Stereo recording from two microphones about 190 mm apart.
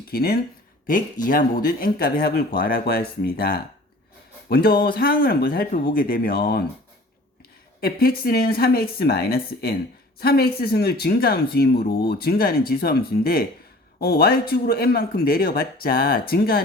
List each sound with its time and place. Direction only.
0.1 s speech: 55° left (ahead or behind)
7.8 s speech: 55° left (ahead or behind)